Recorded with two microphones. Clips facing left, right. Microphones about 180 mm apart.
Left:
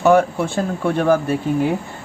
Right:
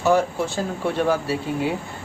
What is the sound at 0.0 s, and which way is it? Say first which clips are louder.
Speech: left 5 dB; 60° left (ahead or behind).